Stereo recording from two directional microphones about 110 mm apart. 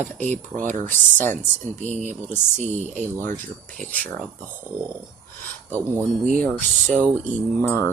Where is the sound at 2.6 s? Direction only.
90° right.